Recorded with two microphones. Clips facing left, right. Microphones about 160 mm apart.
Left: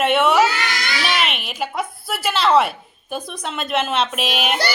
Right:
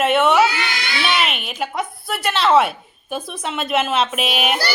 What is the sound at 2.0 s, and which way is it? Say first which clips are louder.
A woman's voice: right 1 dB; centre (ahead or behind).